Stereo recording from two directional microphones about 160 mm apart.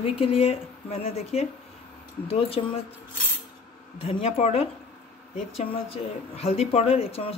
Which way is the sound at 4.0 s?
40° left (ahead or behind).